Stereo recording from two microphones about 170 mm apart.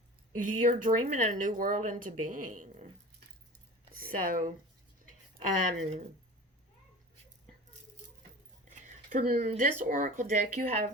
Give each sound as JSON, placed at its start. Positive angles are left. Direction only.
{"t": 0.3, "sound": "speech", "side_deg": -50}
{"t": 3.9, "sound": "speech", "side_deg": -55}
{"t": 5.8, "sound": "speech", "side_deg": -40}
{"t": 8.7, "sound": "a sound", "side_deg": -50}
{"t": 9.4, "sound": "speech", "side_deg": -50}